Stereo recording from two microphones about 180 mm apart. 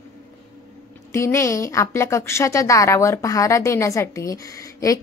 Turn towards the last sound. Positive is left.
turn(degrees=20)  # may be behind; listen again after turning